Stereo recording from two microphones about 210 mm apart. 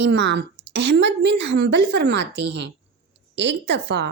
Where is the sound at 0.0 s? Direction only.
60° right (ahead or behind).